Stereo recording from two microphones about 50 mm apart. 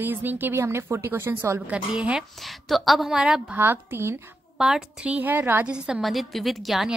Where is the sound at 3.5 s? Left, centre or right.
Right.